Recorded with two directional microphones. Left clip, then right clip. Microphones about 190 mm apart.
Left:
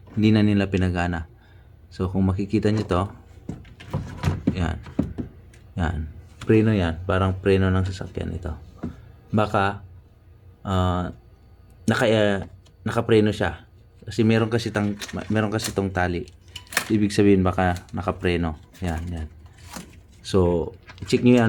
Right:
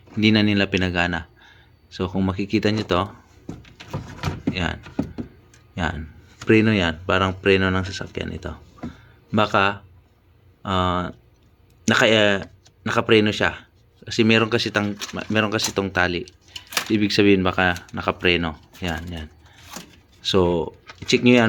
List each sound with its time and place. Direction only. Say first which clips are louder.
0.2 s speech: right 3 dB; 5° right (ahead or behind)
4.5 s speech: right 3 dB; 5° right (ahead or behind)
6.5 s speech: right 3 dB; 15° right (ahead or behind)